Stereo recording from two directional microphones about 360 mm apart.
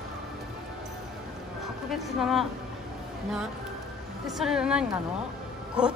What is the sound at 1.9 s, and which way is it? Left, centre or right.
Speech, centre.